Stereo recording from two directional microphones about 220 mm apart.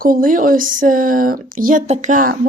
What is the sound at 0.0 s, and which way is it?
Speech, 40° right (ahead or behind).